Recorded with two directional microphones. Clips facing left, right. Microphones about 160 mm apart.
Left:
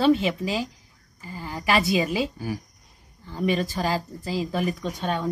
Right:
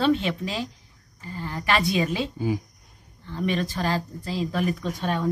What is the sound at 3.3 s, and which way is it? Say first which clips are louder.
A woman's voice: left 2 dB; 5° left (ahead or behind).